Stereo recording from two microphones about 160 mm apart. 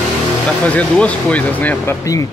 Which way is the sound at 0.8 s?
10° left (ahead or behind).